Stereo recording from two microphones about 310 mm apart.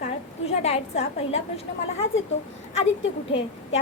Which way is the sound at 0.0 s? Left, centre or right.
Left.